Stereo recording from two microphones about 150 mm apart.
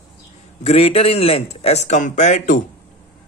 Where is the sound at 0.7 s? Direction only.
40° left (ahead or behind).